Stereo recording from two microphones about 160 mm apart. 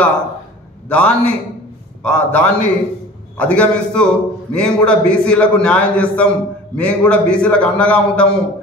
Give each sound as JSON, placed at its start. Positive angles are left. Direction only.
{"t": 0.8, "sound": "a man's voice", "side_deg": 5}